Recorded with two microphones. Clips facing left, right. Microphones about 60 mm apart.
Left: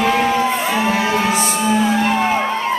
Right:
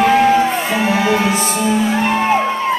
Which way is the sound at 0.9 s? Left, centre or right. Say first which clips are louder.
Right 2 dB; right.